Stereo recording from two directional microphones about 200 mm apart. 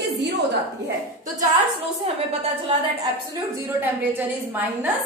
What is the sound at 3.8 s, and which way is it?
A woman's voice, 10° right (ahead or behind).